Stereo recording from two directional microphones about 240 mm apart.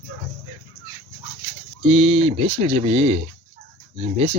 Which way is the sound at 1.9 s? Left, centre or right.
Right.